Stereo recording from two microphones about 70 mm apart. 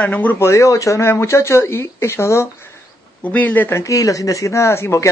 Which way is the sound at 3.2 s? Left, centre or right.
Left.